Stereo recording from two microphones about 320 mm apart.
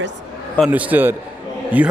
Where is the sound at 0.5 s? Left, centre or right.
Centre.